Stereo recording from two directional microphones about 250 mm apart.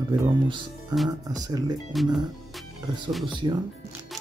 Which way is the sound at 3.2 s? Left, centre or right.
Centre.